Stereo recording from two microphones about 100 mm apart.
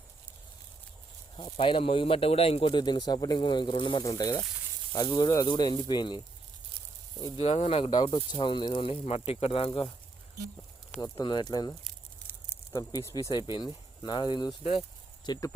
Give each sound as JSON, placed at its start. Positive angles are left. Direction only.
{"t": 1.5, "sound": "speech", "side_deg": 60}
{"t": 2.7, "sound": "speech", "side_deg": 50}
{"t": 4.0, "sound": "speech", "side_deg": 40}
{"t": 7.3, "sound": "speech", "side_deg": 90}
{"t": 8.0, "sound": "speech", "side_deg": 60}
{"t": 11.0, "sound": "speech", "side_deg": 50}
{"t": 13.3, "sound": "speech", "side_deg": 50}
{"t": 14.6, "sound": "speech", "side_deg": 75}
{"t": 15.3, "sound": "speech", "side_deg": 35}